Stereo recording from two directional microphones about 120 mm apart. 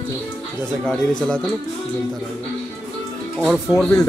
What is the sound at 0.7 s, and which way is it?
Speech, 10° left (ahead or behind).